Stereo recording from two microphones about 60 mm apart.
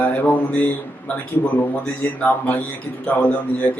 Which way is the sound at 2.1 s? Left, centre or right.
Left.